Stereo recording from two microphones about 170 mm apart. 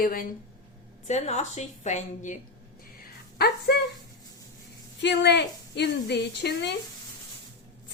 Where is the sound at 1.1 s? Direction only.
45° left (ahead or behind).